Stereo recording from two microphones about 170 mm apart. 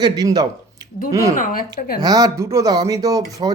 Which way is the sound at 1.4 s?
55° left (ahead or behind).